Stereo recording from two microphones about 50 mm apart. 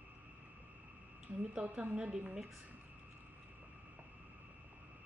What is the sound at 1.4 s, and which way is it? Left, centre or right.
Speech, right.